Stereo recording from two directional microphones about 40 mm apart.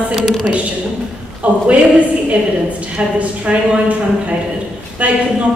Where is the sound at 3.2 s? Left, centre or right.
Right.